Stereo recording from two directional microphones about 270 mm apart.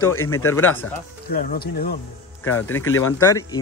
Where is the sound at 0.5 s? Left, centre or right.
Centre.